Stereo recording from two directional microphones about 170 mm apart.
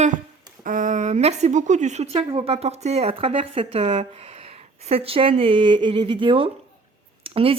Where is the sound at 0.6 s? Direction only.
50° right (ahead or behind).